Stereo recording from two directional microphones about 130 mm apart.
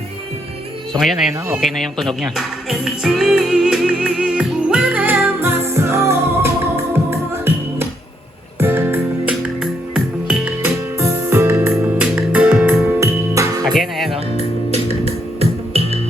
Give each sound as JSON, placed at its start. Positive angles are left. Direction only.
{"t": 1.6, "sound": "music", "side_deg": 0}
{"t": 9.3, "sound": "music", "side_deg": -5}
{"t": 10.9, "sound": "music", "side_deg": -20}
{"t": 12.8, "sound": "music", "side_deg": -25}
{"t": 13.7, "sound": "music", "side_deg": 0}
{"t": 14.3, "sound": "music", "side_deg": -50}